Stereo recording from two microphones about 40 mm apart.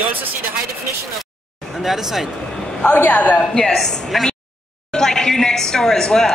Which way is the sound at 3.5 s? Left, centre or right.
Centre.